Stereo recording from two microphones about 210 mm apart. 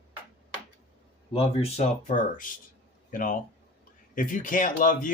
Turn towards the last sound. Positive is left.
turn(degrees=40)  # may be behind; listen again after turning